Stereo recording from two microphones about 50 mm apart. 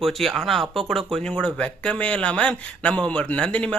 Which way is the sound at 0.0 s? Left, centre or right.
Centre.